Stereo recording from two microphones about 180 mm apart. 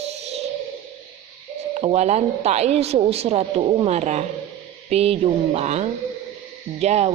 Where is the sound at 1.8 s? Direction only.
40° right (ahead or behind).